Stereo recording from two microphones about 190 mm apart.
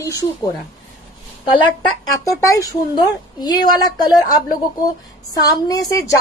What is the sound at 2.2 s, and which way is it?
A woman's voice, 20° left (ahead or behind).